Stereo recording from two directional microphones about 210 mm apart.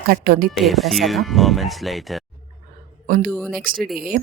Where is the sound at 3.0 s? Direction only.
40° right (ahead or behind).